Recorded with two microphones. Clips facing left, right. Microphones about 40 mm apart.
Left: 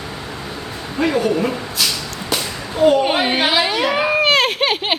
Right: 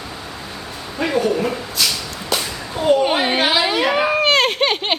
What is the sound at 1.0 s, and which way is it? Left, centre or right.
Speech, centre.